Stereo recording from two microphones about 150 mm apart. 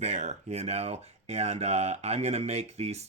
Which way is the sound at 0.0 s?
50° right (ahead or behind).